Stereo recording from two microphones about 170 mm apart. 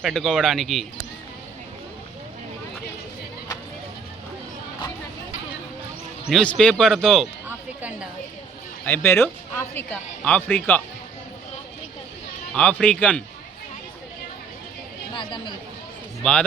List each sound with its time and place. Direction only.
0.0 s a man's voice: centre (ahead or behind)
6.2 s a man's voice: 5° left (ahead or behind)
7.4 s a sound: 10° right (ahead or behind)
8.8 s speech: 10° left (ahead or behind)
12.5 s speech: 5° left (ahead or behind)
15.1 s a woman's voice: 25° left (ahead or behind)